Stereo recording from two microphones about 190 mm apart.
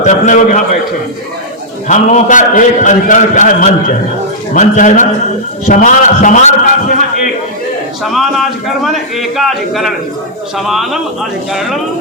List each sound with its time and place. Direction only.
0.0 s a man's voice: 40° left (ahead or behind)
1.9 s a man's voice: 40° left (ahead or behind)
8.0 s a man's voice: centre (ahead or behind)